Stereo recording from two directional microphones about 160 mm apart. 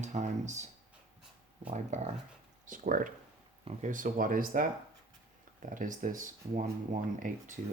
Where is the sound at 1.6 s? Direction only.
45° right (ahead or behind).